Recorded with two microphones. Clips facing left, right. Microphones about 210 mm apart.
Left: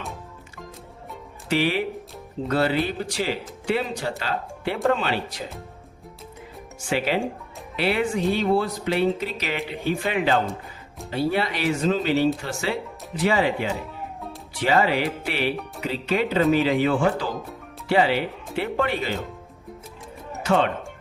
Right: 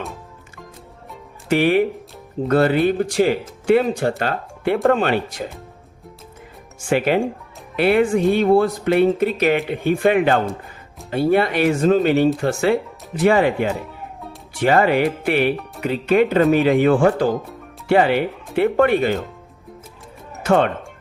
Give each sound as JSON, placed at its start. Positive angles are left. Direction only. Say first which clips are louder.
{"t": 1.5, "sound": "speech", "louder": "right 7 dB", "side_deg": -50}
{"t": 6.9, "sound": "speech", "louder": "right 6 dB", "side_deg": -50}
{"t": 20.4, "sound": "speech", "louder": "right 5 dB", "side_deg": -50}